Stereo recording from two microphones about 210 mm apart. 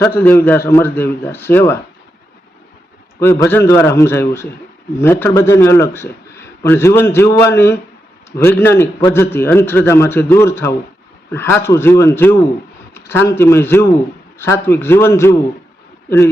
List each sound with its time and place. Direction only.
0.0 s a man's voice: 10° left (ahead or behind)
3.2 s a man's voice: 15° left (ahead or behind)